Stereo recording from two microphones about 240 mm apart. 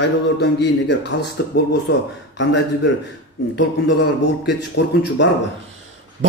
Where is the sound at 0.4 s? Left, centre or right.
Left.